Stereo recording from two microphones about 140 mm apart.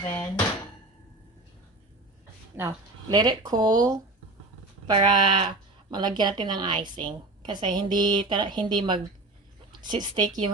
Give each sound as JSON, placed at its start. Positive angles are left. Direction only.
{"t": 0.0, "sound": "a sound", "side_deg": 15}
{"t": 2.6, "sound": "speech", "side_deg": -20}
{"t": 3.2, "sound": "speech", "side_deg": -30}